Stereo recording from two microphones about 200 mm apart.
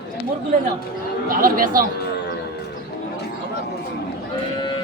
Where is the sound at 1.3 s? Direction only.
45° right (ahead or behind).